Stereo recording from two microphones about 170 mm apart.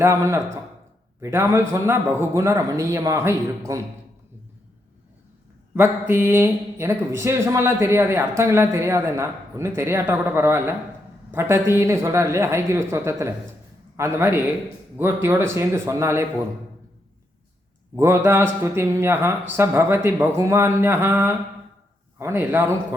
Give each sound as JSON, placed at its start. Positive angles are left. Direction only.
{"t": 0.0, "sound": "speech", "side_deg": -15}
{"t": 5.7, "sound": "speech", "side_deg": -15}
{"t": 17.9, "sound": "speech", "side_deg": -15}